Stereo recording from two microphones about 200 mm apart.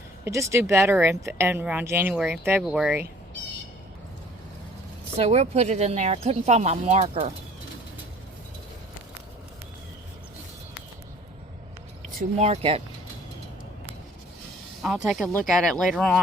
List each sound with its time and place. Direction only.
0.3 s speech: 15° right (ahead or behind)
5.1 s speech: 30° right (ahead or behind)
12.4 s speech: 30° right (ahead or behind)
14.8 s speech: centre (ahead or behind)